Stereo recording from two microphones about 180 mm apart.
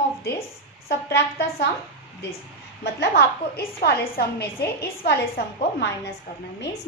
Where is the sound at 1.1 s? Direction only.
65° left (ahead or behind).